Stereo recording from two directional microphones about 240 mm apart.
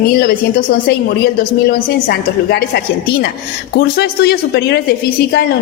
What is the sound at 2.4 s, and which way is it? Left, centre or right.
A woman's voice, left.